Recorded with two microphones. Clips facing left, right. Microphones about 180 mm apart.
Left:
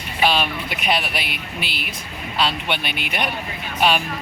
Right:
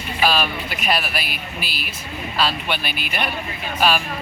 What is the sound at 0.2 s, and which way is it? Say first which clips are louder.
Speech: even; 25° left (ahead or behind).